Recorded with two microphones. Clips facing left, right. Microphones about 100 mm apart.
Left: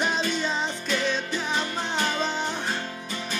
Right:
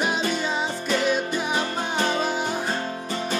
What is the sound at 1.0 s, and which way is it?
Music, 10° right (ahead or behind).